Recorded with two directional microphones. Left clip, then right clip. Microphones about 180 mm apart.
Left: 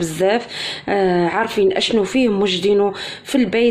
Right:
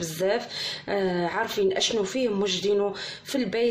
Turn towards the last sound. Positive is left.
turn(degrees=30)  # may be behind; listen again after turning